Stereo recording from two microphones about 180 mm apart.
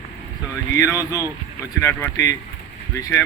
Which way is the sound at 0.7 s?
20° left (ahead or behind).